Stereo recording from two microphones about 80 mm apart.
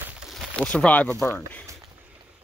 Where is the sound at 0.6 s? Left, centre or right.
Centre.